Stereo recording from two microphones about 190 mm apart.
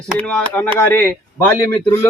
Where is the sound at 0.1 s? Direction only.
5° left (ahead or behind).